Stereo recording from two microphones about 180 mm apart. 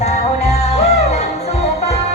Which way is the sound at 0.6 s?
35° left (ahead or behind).